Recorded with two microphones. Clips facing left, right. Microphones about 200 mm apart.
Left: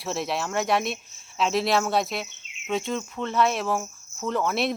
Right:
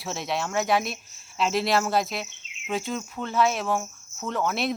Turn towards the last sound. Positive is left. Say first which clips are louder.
# left 2 dB
turn(degrees=0)  # may be behind; listen again after turning